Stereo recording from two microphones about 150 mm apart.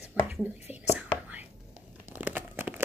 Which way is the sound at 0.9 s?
10° right (ahead or behind).